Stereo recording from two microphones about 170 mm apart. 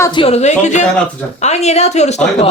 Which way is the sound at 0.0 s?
30° left (ahead or behind).